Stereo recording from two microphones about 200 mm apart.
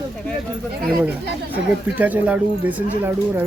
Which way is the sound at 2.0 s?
5° right (ahead or behind).